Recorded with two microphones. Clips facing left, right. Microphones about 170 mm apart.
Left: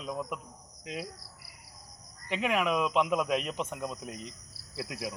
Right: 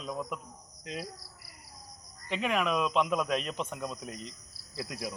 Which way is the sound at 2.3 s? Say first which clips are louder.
Left 1 dB; 10° left (ahead or behind).